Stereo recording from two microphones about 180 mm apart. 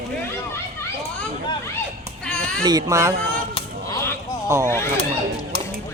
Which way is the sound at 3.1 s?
55° right (ahead or behind).